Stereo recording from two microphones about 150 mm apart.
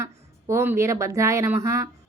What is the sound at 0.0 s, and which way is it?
Speech, 20° right (ahead or behind).